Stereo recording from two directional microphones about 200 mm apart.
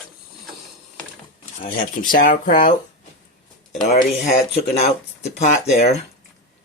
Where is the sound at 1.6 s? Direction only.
40° left (ahead or behind).